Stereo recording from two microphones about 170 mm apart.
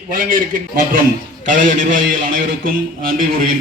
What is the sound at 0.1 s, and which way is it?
A man's voice, 55° right (ahead or behind).